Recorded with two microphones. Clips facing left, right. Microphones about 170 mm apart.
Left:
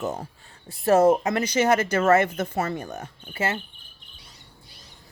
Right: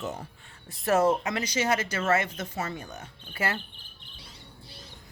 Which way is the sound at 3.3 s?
25° left (ahead or behind).